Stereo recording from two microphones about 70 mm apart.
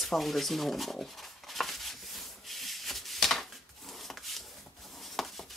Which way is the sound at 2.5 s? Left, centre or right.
Centre.